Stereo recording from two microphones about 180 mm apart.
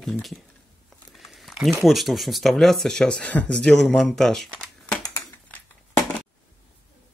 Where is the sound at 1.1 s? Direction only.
Centre (ahead or behind).